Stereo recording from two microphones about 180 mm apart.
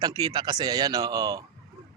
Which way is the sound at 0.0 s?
20° right (ahead or behind).